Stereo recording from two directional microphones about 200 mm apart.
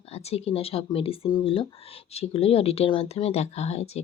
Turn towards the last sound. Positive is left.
turn(degrees=30)  # may be behind; listen again after turning